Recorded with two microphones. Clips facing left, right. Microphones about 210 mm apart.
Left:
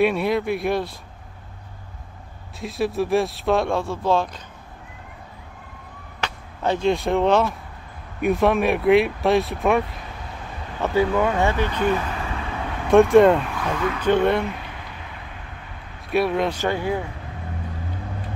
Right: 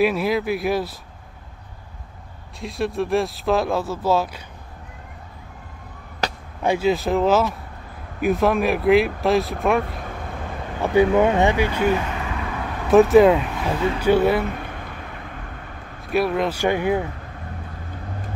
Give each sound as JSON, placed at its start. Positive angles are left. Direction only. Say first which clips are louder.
{"t": 0.0, "sound": "speech", "louder": "even", "side_deg": 0}
{"t": 2.6, "sound": "speech", "louder": "left 1 dB", "side_deg": 0}
{"t": 6.2, "sound": "chop", "louder": "right 4 dB", "side_deg": -40}
{"t": 6.6, "sound": "speech", "louder": "right 1 dB", "side_deg": -10}
{"t": 10.8, "sound": "speech", "louder": "right 4 dB", "side_deg": -20}
{"t": 12.9, "sound": "speech", "louder": "right 1 dB", "side_deg": -5}
{"t": 13.6, "sound": "speech", "louder": "right 2 dB", "side_deg": -25}
{"t": 13.9, "sound": "speech", "louder": "right 1 dB", "side_deg": -10}
{"t": 16.1, "sound": "speech", "louder": "even", "side_deg": 0}
{"t": 16.6, "sound": "speech", "louder": "right 3 dB", "side_deg": -15}